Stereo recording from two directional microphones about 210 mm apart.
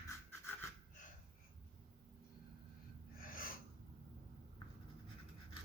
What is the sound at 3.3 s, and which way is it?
Gasp, 40° left (ahead or behind).